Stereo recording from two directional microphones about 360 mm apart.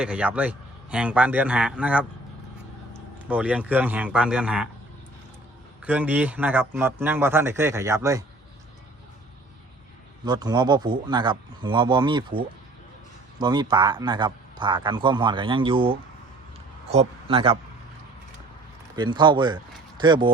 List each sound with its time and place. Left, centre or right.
0.0 s a man's voice: centre
3.2 s a man's voice: centre
5.8 s a man's voice: centre
10.2 s a man's voice: centre
18.9 s a man's voice: centre